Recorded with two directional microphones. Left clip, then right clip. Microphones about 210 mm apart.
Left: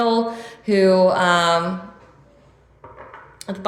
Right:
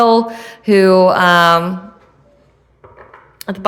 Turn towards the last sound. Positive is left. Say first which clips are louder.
# right 6 dB
turn(degrees=-45)  # may be behind; listen again after turning